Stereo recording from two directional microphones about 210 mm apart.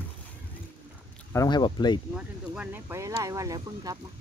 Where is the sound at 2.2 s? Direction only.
5° right (ahead or behind).